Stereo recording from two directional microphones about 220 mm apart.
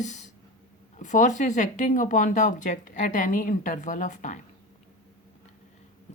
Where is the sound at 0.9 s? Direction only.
35° left (ahead or behind).